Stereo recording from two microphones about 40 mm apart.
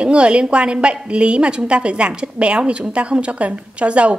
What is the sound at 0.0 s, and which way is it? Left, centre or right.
A woman's voice, right.